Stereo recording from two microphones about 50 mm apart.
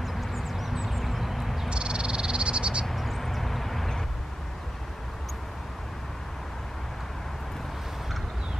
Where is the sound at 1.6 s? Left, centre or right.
Centre.